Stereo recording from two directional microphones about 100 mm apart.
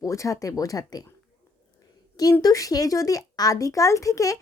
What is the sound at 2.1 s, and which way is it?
Speech, 40° left (ahead or behind).